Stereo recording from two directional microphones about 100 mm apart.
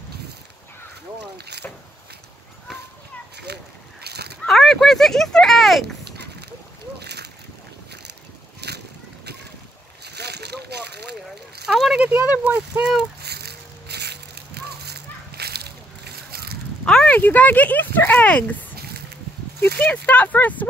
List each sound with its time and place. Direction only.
4.5 s speech: centre (ahead or behind)
11.6 s a sound: 5° right (ahead or behind)
12.1 s speech: 15° right (ahead or behind)
16.8 s speech: 10° left (ahead or behind)
19.8 s speech: 15° left (ahead or behind)